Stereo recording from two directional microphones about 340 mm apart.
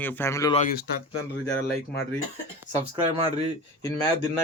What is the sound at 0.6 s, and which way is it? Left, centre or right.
Speech, left.